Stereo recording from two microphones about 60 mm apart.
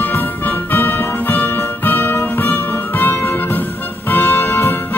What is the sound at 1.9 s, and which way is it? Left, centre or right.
Music, left.